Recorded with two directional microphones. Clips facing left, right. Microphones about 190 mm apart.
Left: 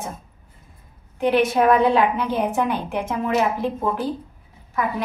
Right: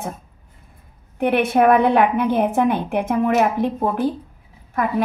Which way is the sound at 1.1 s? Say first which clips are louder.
Right 1 dB; 55° right (ahead or behind).